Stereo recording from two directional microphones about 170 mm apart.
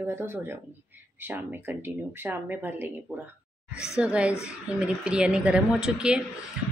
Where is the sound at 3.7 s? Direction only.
15° left (ahead or behind).